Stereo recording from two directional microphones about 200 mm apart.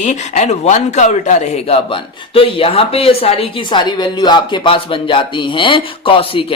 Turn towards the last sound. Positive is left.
turn(degrees=25)  # may be behind; listen again after turning